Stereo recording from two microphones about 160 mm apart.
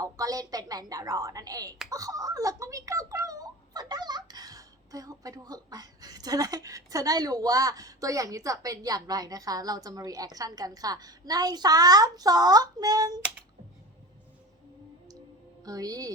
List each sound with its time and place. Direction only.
0.0 s speech: 20° right (ahead or behind)
15.6 s speech: 20° right (ahead or behind)